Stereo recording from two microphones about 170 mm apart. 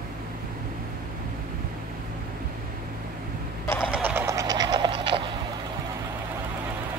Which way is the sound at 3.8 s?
5° right (ahead or behind).